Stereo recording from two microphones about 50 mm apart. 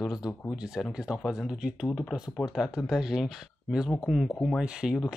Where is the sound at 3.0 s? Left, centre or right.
Centre.